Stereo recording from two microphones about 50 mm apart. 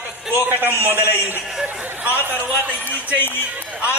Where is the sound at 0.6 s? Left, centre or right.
Right.